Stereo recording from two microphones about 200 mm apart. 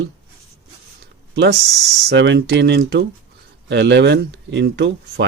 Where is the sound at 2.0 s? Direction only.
65° right (ahead or behind).